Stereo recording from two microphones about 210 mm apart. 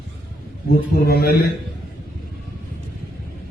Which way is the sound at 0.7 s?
45° left (ahead or behind).